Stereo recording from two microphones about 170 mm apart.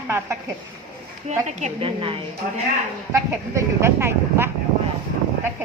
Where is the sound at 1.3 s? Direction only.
45° right (ahead or behind).